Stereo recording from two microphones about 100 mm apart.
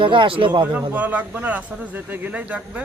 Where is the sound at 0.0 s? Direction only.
55° right (ahead or behind).